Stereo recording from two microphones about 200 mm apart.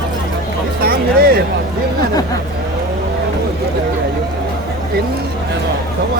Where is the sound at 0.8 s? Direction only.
50° right (ahead or behind).